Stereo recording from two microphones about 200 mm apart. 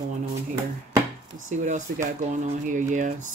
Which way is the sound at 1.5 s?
40° right (ahead or behind).